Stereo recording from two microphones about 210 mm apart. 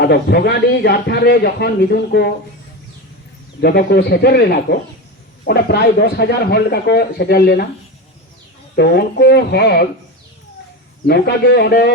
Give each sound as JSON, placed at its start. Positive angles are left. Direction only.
{"t": 0.0, "sound": "a man's voice", "side_deg": 50}
{"t": 3.6, "sound": "a man's voice", "side_deg": 50}
{"t": 8.7, "sound": "a man's voice", "side_deg": 50}
{"t": 11.0, "sound": "a man's voice", "side_deg": 50}